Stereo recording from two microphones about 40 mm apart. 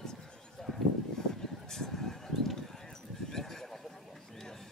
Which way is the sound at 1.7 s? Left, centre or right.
Centre.